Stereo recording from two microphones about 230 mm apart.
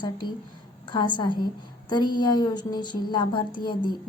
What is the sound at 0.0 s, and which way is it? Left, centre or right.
A woman's voice, centre.